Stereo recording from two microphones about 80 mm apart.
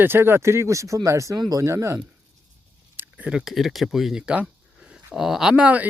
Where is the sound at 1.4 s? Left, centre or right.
Right.